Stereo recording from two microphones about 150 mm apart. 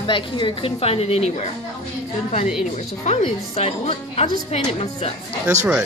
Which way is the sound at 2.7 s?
45° left (ahead or behind).